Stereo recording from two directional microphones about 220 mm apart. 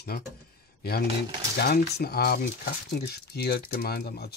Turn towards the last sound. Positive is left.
turn(degrees=45)  # may be behind; listen again after turning